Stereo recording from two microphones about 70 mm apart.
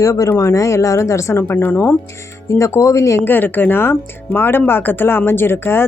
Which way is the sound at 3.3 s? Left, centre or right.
Left.